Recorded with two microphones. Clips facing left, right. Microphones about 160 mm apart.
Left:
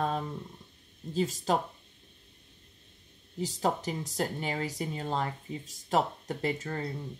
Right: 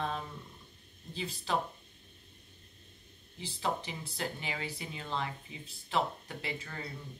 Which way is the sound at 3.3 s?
40° left (ahead or behind).